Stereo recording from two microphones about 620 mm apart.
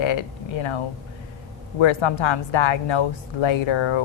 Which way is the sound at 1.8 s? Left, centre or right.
Left.